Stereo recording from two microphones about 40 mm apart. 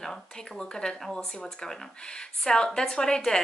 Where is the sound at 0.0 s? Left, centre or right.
Centre.